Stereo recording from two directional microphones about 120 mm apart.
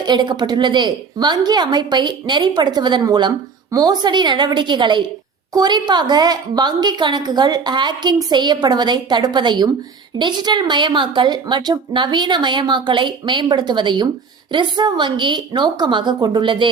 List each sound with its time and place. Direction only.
0.0 s a woman's voice: 35° right (ahead or behind)